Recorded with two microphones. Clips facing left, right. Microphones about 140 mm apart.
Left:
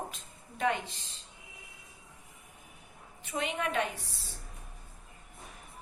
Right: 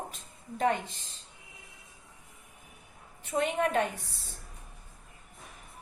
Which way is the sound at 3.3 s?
45° right (ahead or behind).